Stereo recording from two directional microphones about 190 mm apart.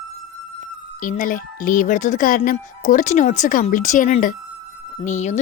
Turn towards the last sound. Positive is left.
turn(degrees=40)  # may be behind; listen again after turning